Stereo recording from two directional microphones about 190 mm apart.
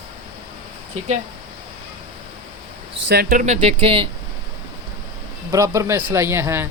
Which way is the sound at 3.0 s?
60° right (ahead or behind).